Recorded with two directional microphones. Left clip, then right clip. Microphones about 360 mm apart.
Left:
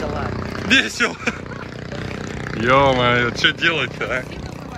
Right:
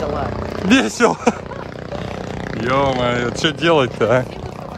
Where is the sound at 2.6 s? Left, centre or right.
Centre.